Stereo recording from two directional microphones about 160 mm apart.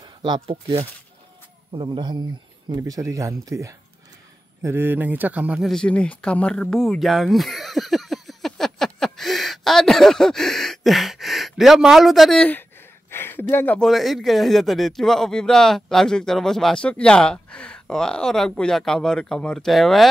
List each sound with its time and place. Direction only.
0.0 s a man's voice: 30° right (ahead or behind); by 20.1 s centre (ahead or behind)